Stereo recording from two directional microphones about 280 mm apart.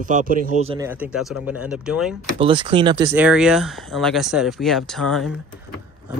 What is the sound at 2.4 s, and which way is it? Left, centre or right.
Speech, centre.